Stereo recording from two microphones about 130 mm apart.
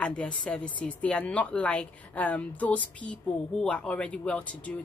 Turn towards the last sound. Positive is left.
turn(degrees=10)  # may be behind; listen again after turning